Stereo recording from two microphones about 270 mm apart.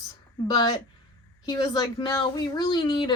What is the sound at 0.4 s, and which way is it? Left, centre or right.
A woman's voice, centre.